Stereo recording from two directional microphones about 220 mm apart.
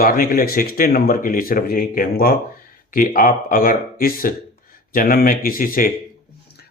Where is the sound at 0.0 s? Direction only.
40° left (ahead or behind).